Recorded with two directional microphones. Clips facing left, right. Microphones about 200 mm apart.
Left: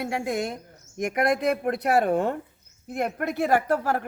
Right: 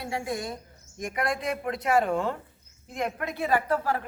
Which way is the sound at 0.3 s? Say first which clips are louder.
Left 4 dB; 75° left (ahead or behind).